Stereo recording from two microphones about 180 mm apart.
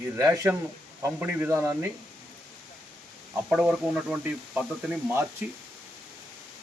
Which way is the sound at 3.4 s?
5° right (ahead or behind).